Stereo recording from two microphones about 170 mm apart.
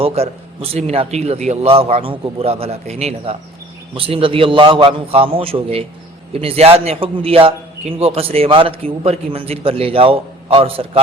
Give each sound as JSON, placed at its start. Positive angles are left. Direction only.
{"t": 0.0, "sound": "a man's voice", "side_deg": -35}